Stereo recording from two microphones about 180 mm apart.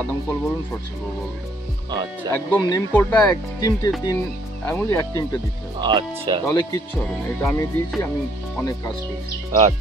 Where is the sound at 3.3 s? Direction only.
20° left (ahead or behind).